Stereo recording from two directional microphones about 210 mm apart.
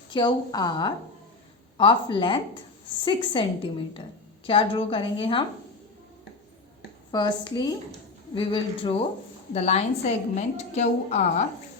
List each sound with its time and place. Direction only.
0.1 s a woman's voice: 20° left (ahead or behind)
7.1 s a woman's voice: 20° left (ahead or behind)